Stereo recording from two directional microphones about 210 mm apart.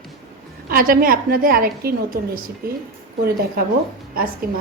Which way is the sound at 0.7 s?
45° right (ahead or behind).